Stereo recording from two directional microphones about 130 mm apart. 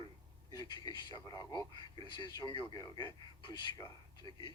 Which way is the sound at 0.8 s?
35° left (ahead or behind).